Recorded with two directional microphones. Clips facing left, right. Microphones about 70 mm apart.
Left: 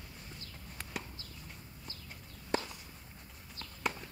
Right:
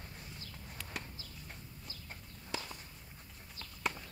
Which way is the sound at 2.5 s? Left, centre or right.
Left.